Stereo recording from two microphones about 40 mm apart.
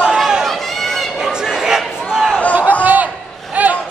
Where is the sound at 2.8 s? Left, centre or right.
Right.